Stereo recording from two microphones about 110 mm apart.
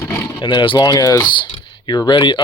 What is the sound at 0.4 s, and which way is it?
Speech, 50° left (ahead or behind).